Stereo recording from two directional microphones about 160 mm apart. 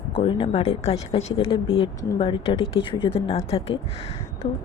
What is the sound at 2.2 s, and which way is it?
Speech, 35° left (ahead or behind).